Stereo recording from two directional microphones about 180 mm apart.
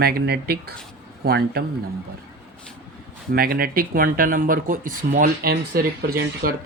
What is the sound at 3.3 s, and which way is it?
Speech, 55° right (ahead or behind).